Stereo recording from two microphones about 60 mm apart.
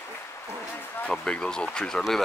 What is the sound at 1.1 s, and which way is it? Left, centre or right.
Speech, centre.